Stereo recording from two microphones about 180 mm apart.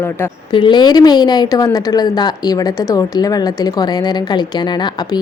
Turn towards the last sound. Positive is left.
turn(degrees=25)  # may be behind; listen again after turning